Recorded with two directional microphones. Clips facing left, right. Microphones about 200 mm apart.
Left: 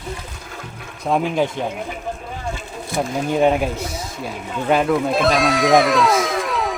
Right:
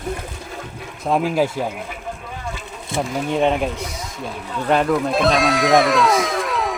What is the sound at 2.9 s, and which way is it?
Speech, 25° right (ahead or behind).